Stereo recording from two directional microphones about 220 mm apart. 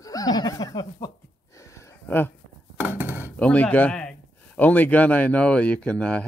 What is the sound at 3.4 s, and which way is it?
Speech, 5° left (ahead or behind).